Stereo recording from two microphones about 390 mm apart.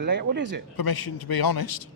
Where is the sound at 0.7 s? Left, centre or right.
Left.